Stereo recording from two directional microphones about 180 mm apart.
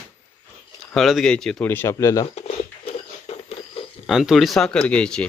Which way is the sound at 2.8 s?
35° left (ahead or behind).